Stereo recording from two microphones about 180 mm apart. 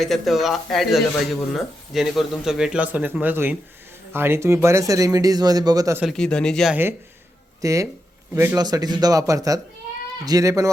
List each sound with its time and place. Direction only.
0.0 s speech: centre (ahead or behind); by 6.0 s 20° right (ahead or behind)
6.0 s speech: centre (ahead or behind)
7.6 s speech: 15° right (ahead or behind)